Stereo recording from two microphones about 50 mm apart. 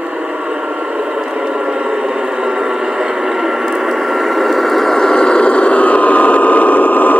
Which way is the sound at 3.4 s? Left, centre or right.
Centre.